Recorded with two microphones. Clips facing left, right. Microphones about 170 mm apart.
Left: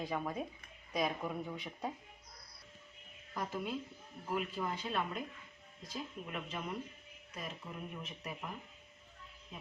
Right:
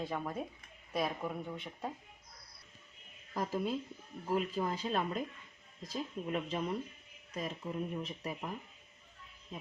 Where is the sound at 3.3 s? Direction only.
40° right (ahead or behind).